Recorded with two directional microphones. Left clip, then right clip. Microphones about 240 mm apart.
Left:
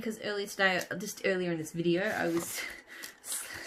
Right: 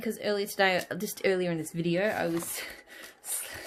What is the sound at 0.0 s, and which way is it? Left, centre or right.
Speech, right.